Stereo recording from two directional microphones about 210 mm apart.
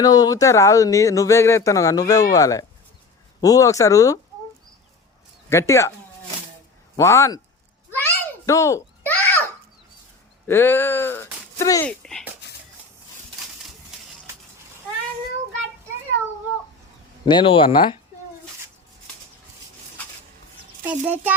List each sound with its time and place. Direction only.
0.0 s speech: 20° left (ahead or behind)
5.5 s speech: 15° left (ahead or behind)
6.9 s speech: 15° left (ahead or behind)
7.9 s a sound: 10° left (ahead or behind)
10.4 s speech: 10° left (ahead or behind)
11.9 s speech: 5° left (ahead or behind)
17.2 s speech: 25° left (ahead or behind)
20.8 s a child's voice: 10° right (ahead or behind)